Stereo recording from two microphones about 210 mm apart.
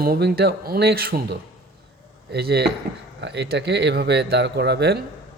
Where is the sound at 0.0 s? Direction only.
50° right (ahead or behind).